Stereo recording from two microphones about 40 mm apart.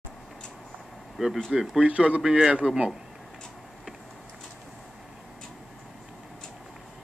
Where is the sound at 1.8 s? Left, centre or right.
Right.